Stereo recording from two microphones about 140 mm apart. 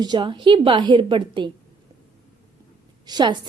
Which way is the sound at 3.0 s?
30° right (ahead or behind).